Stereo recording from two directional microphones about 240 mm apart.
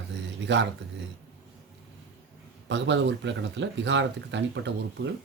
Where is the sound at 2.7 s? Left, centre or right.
Right.